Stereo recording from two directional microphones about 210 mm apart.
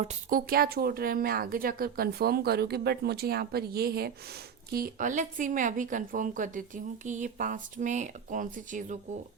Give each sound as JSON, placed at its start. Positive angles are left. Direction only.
{"t": 0.0, "sound": "speech", "side_deg": -35}